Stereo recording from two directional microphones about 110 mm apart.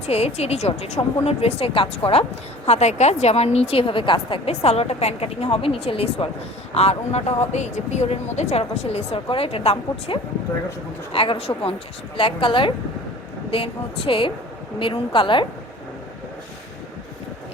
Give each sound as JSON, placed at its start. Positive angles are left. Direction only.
{"t": 0.0, "sound": "a woman's voice", "side_deg": 75}
{"t": 2.6, "sound": "a woman's voice", "side_deg": 90}
{"t": 6.7, "sound": "a woman's voice", "side_deg": 75}